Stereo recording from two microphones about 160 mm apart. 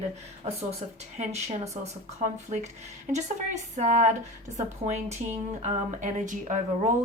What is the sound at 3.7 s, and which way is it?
A woman's voice, 45° right (ahead or behind).